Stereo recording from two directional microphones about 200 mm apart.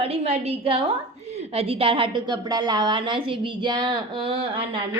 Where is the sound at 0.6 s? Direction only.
30° right (ahead or behind).